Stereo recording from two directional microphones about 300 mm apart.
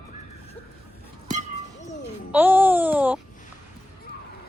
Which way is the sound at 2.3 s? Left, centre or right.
Centre.